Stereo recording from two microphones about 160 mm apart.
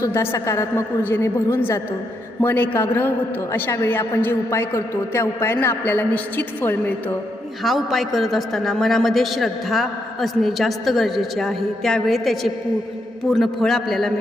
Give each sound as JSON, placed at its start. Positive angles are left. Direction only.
{"t": 0.0, "sound": "a man's voice", "side_deg": 15}
{"t": 7.6, "sound": "a woman's voice", "side_deg": 0}